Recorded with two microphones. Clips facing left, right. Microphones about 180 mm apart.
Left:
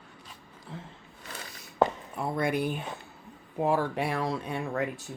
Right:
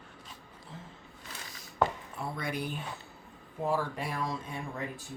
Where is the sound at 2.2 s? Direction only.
55° left (ahead or behind).